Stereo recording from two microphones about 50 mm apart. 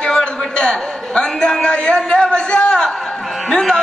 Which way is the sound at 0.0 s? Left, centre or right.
Centre.